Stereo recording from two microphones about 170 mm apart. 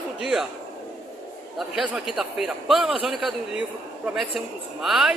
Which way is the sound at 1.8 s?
Centre (ahead or behind).